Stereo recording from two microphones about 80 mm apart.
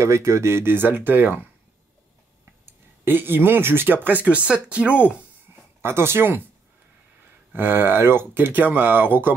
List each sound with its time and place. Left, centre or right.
0.0 s speech: right
2.6 s speech: right
5.8 s speech: right
7.5 s speech: right